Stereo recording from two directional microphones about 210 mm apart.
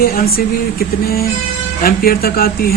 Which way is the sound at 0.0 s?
45° left (ahead or behind).